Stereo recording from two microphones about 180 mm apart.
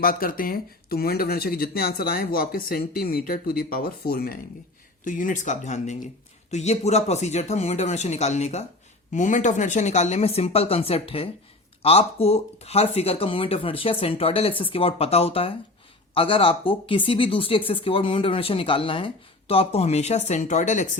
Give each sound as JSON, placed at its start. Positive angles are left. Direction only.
{"t": 0.0, "sound": "speech", "side_deg": 55}